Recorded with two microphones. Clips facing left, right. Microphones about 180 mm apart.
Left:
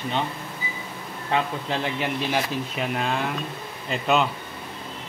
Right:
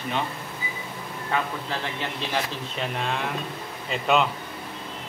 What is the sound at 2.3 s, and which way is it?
A man's voice, 5° left (ahead or behind).